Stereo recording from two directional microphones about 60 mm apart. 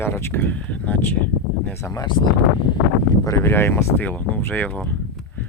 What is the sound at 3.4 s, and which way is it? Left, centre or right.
Speech, left.